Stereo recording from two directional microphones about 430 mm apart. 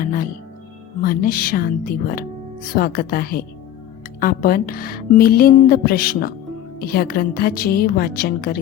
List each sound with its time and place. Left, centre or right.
0.0 s speech: centre